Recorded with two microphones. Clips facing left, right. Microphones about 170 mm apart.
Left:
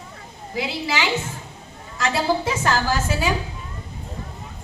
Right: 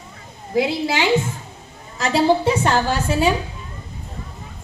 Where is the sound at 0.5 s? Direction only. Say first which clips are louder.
Right 6 dB; 45° right (ahead or behind).